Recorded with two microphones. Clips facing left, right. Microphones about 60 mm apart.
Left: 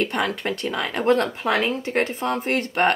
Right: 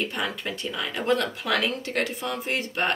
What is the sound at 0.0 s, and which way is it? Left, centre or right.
Speech, left.